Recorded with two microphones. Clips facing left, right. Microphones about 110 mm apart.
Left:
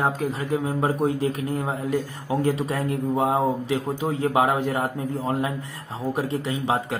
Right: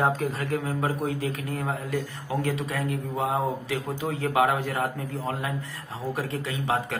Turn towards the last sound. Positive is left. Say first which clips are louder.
# left 3 dB
turn(degrees=25)  # may be behind; listen again after turning